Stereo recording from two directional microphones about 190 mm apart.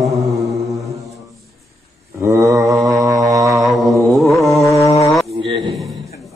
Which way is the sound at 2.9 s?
20° right (ahead or behind).